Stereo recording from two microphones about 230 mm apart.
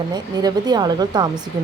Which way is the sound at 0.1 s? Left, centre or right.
Centre.